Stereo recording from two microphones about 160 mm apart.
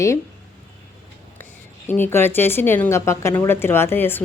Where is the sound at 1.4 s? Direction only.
15° left (ahead or behind).